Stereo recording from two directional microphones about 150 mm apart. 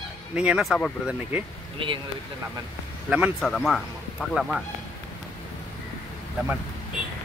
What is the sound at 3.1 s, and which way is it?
Speech, 5° right (ahead or behind).